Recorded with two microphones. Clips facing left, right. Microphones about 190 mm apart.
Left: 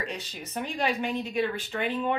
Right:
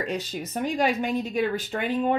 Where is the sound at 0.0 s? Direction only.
45° right (ahead or behind).